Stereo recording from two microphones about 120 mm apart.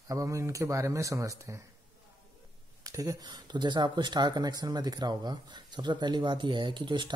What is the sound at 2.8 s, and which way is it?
Speech, 30° right (ahead or behind).